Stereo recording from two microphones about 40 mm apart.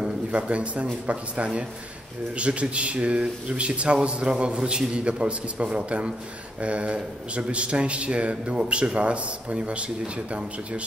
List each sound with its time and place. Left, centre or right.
0.3 s a man's voice: right